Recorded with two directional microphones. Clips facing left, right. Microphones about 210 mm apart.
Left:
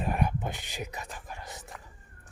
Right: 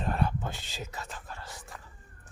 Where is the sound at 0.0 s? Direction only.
15° left (ahead or behind).